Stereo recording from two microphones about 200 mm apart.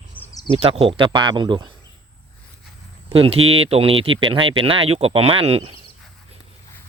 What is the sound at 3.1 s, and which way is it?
Speech, 30° right (ahead or behind).